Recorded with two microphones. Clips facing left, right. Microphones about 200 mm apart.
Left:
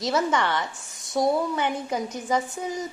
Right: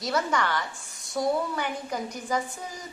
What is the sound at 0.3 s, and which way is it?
A woman's voice, 20° left (ahead or behind).